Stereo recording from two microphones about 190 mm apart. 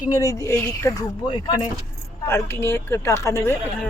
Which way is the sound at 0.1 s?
20° left (ahead or behind).